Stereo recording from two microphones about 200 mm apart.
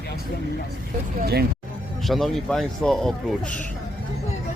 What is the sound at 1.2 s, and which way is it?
Vehicle, 50° right (ahead or behind).